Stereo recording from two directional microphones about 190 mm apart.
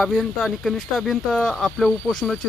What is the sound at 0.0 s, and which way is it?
Speech, centre (ahead or behind).